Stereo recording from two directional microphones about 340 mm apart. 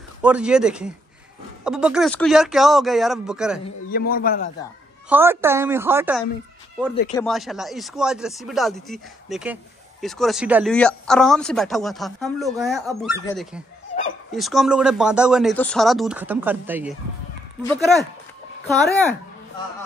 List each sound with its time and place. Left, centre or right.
0.2 s speech: centre
3.6 s a man's voice: left
5.1 s a woman's voice: centre